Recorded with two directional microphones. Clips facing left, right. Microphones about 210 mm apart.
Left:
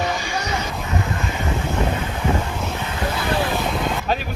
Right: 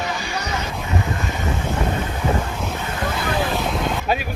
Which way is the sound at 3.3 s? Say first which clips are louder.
Even; centre (ahead or behind).